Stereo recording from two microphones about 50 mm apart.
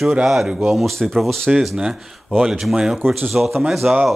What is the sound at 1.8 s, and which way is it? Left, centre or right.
Speech, centre.